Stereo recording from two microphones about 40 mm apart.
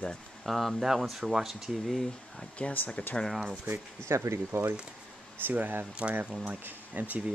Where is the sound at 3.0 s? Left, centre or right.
Left.